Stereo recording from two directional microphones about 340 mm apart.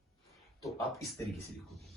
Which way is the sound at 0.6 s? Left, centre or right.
Centre.